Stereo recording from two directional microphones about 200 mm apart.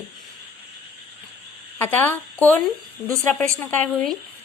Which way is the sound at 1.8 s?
10° left (ahead or behind).